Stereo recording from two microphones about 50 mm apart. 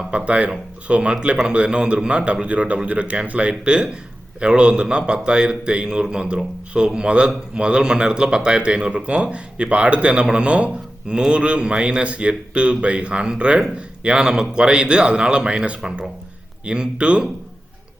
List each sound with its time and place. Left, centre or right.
0.3 s a man's voice: right